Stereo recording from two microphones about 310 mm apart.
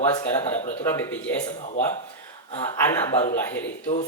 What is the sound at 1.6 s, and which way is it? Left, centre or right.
Speech, left.